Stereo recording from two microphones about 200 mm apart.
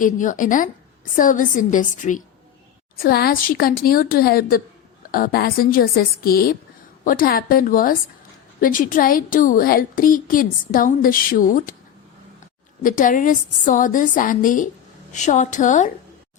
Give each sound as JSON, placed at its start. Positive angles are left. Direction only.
{"t": 0.0, "sound": "a woman's voice", "side_deg": 40}
{"t": 12.8, "sound": "a woman's voice", "side_deg": 40}